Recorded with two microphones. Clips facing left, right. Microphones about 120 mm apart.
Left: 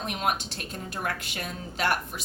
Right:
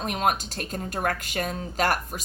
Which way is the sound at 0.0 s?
45° right (ahead or behind).